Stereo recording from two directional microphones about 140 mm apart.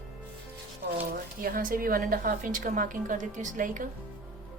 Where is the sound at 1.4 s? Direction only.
90° right; by 3.9 s 70° right (ahead or behind).